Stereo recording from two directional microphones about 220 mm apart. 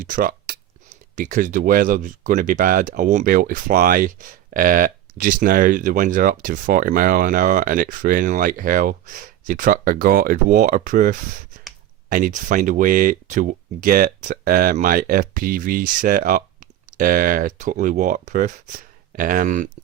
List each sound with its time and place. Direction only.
0.0 s speech: 40° right (ahead or behind)